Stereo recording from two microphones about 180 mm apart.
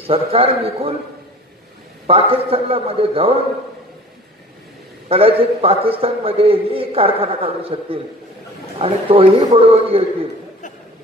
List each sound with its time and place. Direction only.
0.0 s a man's voice: 35° right (ahead or behind)
2.0 s a man's voice: 35° right (ahead or behind)
5.0 s a man's voice: 35° right (ahead or behind)